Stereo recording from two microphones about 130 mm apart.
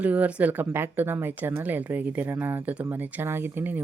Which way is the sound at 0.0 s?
10° right (ahead or behind).